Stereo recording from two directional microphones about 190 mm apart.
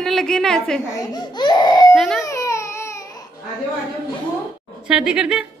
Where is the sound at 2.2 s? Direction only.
15° left (ahead or behind).